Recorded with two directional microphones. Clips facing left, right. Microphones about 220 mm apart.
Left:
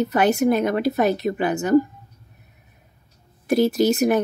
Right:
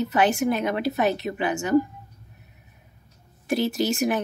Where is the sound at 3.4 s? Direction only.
40° left (ahead or behind).